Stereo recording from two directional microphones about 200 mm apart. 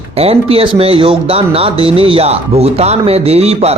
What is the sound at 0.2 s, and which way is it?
Speech, 30° right (ahead or behind).